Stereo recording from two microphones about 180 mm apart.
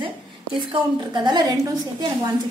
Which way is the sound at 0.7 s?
25° right (ahead or behind).